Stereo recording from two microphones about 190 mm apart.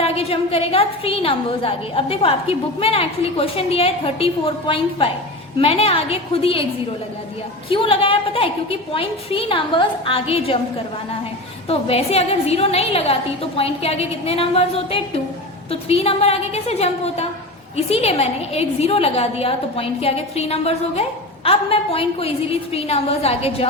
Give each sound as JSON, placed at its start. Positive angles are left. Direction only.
{"t": 0.0, "sound": "a woman's voice", "side_deg": 30}
{"t": 7.7, "sound": "a woman's voice", "side_deg": 30}
{"t": 11.7, "sound": "a woman's voice", "side_deg": 30}